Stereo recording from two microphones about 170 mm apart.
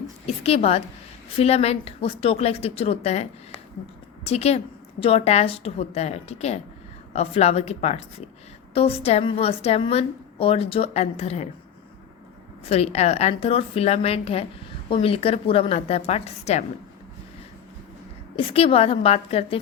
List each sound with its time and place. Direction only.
0.3 s a woman's voice: 35° left (ahead or behind)
12.6 s a woman's voice: 35° left (ahead or behind)
18.3 s a woman's voice: 35° left (ahead or behind)